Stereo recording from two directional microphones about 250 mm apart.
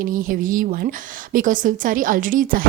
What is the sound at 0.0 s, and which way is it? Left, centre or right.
A woman's voice, right.